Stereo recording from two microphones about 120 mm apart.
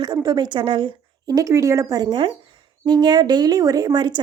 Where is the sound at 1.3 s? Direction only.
25° right (ahead or behind).